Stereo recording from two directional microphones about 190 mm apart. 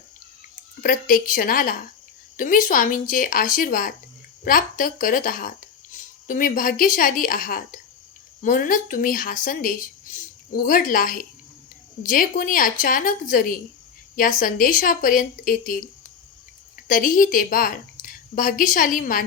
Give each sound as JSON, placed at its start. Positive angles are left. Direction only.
{"t": 0.8, "sound": "speech", "side_deg": 45}
{"t": 16.9, "sound": "speech", "side_deg": 45}